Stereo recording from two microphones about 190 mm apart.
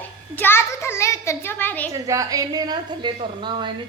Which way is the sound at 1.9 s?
15° right (ahead or behind).